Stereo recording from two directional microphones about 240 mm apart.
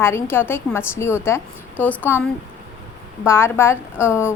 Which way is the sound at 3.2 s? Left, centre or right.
Centre.